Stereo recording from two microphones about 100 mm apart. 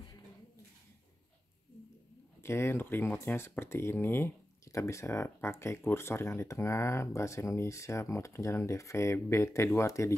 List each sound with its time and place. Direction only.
2.4 s speech: 25° left (ahead or behind)